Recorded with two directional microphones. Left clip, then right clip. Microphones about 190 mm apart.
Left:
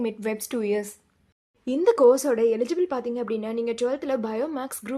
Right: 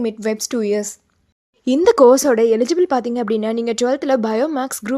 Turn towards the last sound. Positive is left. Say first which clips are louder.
# right 10 dB
turn(degrees=-40)  # may be behind; listen again after turning